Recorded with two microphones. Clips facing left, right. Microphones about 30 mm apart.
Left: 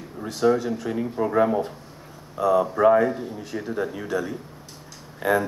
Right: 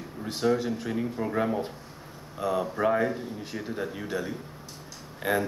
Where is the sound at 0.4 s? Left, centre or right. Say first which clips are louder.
Left 5 dB; centre.